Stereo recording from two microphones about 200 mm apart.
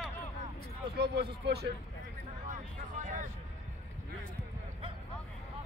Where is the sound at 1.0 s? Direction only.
55° right (ahead or behind).